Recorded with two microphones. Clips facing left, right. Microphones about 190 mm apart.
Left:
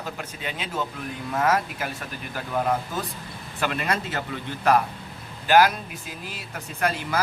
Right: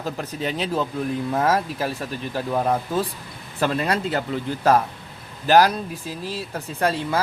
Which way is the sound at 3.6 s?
35° right (ahead or behind).